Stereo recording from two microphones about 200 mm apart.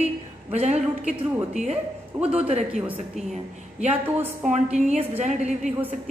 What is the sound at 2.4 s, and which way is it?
Speech, 30° right (ahead or behind).